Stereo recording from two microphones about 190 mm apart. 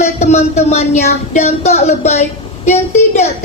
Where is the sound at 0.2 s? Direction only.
35° left (ahead or behind).